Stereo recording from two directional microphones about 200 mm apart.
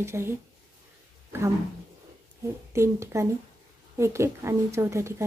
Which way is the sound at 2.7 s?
15° right (ahead or behind).